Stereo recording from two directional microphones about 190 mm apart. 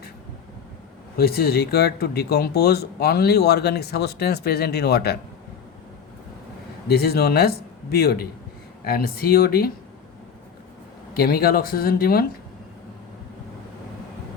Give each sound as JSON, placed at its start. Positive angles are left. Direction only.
{"t": 1.1, "sound": "speech", "side_deg": 55}
{"t": 6.8, "sound": "speech", "side_deg": 55}
{"t": 11.1, "sound": "speech", "side_deg": 55}